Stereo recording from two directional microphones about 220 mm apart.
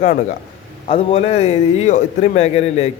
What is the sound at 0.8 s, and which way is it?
A man's voice, 25° left (ahead or behind).